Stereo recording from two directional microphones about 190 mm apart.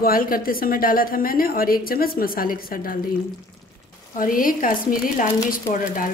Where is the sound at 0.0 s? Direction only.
50° left (ahead or behind).